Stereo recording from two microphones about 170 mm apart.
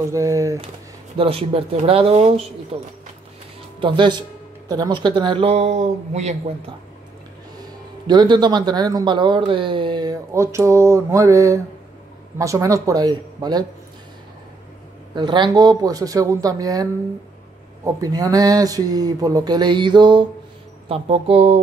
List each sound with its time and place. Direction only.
0.1 s speech: 20° right (ahead or behind)
1.1 s speech: 35° right (ahead or behind)
8.1 s speech: 25° right (ahead or behind)
15.1 s speech: 25° right (ahead or behind)
17.8 s speech: 20° right (ahead or behind); by 21.5 s 35° right (ahead or behind)